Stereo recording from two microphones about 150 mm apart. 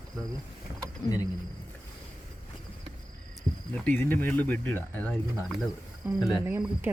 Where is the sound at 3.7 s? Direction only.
10° left (ahead or behind).